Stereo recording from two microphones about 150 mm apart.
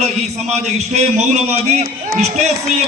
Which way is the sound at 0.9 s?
50° right (ahead or behind).